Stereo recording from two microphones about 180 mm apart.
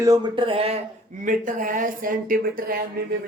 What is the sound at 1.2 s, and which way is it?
Speech, 45° right (ahead or behind).